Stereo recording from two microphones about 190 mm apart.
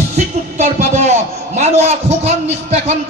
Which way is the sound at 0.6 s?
40° right (ahead or behind).